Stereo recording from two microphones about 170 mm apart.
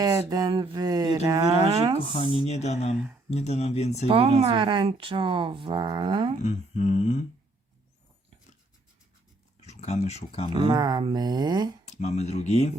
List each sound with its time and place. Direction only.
0.0 s speech: 20° right (ahead or behind)
2.3 s speech: 40° left (ahead or behind)
4.1 s speech: 35° right (ahead or behind)
6.4 s a sound: 40° left (ahead or behind)
9.6 s speech: 40° left (ahead or behind)
10.5 s speech: 25° right (ahead or behind)
11.9 s speech: 40° left (ahead or behind)